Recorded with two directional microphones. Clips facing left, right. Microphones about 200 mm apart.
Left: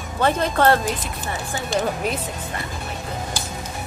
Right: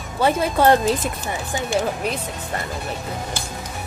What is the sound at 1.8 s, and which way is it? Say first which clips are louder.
Speech: even; centre (ahead or behind).